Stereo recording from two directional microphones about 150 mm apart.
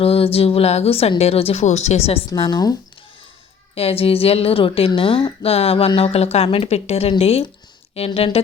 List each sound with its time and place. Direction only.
0.0 s a woman's voice: 40° left (ahead or behind)
2.3 s speech: 30° left (ahead or behind)
3.8 s a woman's voice: 40° left (ahead or behind)